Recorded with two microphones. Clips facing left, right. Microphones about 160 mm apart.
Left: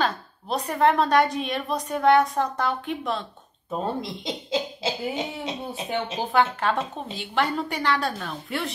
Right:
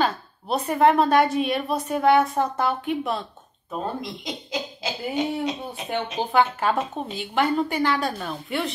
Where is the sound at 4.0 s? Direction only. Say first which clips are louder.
Left 1 dB; 25° left (ahead or behind).